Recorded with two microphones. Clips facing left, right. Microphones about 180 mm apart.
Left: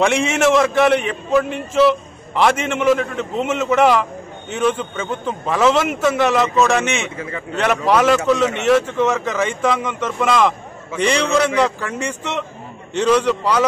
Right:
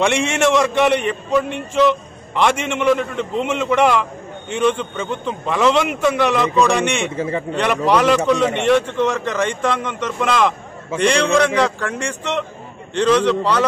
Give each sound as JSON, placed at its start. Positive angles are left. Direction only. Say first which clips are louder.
{"t": 0.0, "sound": "a man's voice", "louder": "left 1 dB", "side_deg": 5}
{"t": 7.2, "sound": "a man's voice", "louder": "right 6 dB", "side_deg": -30}
{"t": 7.5, "sound": "a man's voice", "louder": "left 1 dB", "side_deg": 5}